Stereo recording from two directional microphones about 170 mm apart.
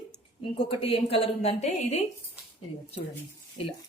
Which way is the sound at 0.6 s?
35° left (ahead or behind).